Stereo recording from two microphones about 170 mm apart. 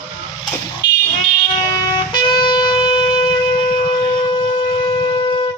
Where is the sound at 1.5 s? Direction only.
25° left (ahead or behind).